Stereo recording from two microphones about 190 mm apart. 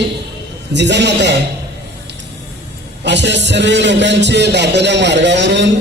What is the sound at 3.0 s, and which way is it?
A man's voice, 65° right (ahead or behind).